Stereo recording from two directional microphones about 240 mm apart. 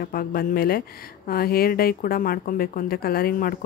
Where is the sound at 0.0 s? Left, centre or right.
Left.